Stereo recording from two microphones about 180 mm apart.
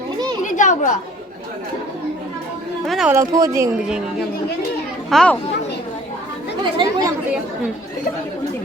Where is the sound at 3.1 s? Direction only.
20° right (ahead or behind).